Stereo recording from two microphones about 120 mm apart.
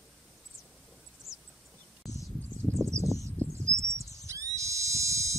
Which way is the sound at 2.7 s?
25° right (ahead or behind).